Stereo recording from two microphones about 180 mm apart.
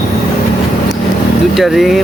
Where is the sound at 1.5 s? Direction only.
Centre (ahead or behind).